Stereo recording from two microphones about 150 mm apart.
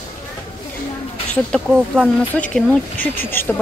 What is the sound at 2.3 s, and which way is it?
Speech, 10° left (ahead or behind).